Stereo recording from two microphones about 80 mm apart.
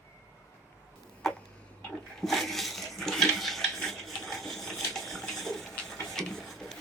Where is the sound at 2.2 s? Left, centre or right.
Centre.